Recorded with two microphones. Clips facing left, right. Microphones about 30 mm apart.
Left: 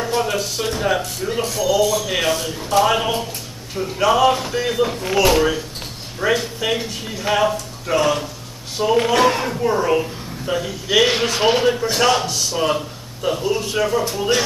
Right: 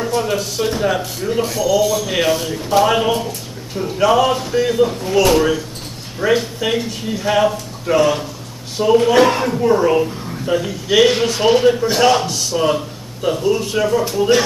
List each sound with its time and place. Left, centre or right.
0.1 s a man's voice: centre
11.1 s speech: centre
11.6 s a man's voice: centre